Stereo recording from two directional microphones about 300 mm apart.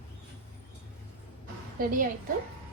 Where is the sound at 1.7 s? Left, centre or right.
Right.